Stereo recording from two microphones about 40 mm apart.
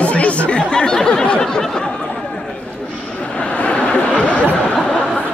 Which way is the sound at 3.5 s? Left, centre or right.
Left.